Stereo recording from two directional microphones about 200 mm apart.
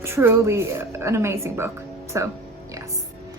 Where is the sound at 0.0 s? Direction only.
10° right (ahead or behind).